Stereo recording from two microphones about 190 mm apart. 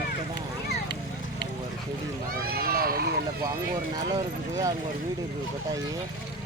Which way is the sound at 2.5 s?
50° right (ahead or behind).